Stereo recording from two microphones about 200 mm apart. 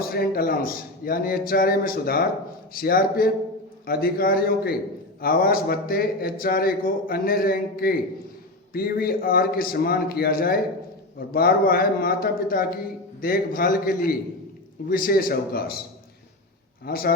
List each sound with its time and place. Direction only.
0.0 s speech: 50° left (ahead or behind)
16.8 s speech: 45° left (ahead or behind)